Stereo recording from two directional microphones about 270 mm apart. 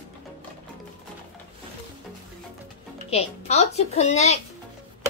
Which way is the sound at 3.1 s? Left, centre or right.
Left.